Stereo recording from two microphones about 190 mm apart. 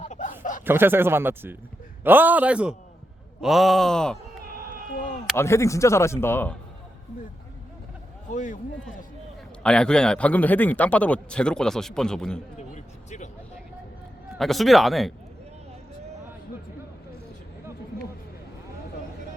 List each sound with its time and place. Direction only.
0.0 s chuckle: 40° left (ahead or behind)
0.6 s speech: 10° right (ahead or behind)
3.4 s groan: centre (ahead or behind)
5.4 s a man's voice: 15° left (ahead or behind)
8.3 s a man's voice: 40° left (ahead or behind)
9.6 s a man's voice: 5° left (ahead or behind)
12.5 s a sound: 40° left (ahead or behind)
14.3 s a man's voice: centre (ahead or behind)